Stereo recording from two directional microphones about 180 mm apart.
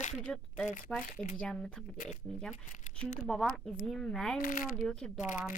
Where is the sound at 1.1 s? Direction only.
45° left (ahead or behind).